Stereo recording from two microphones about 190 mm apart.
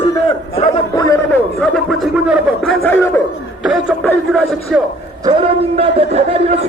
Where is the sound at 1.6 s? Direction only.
Centre (ahead or behind).